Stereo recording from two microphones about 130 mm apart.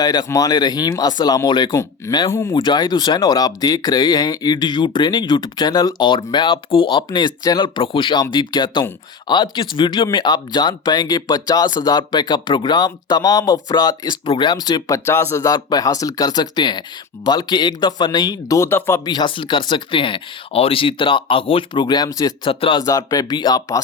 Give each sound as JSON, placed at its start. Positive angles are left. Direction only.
{"t": 0.0, "sound": "speech", "side_deg": 30}
{"t": 2.6, "sound": "speech", "side_deg": 35}
{"t": 19.0, "sound": "speech", "side_deg": 35}
{"t": 22.4, "sound": "speech", "side_deg": 40}
{"t": 22.8, "sound": "speech", "side_deg": 25}